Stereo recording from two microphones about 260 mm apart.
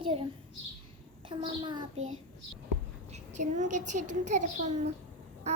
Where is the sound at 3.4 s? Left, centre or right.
Right.